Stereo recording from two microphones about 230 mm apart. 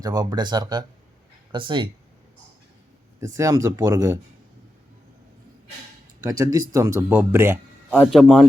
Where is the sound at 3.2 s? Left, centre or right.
Centre.